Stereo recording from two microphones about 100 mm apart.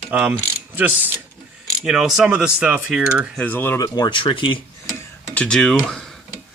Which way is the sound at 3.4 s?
20° left (ahead or behind).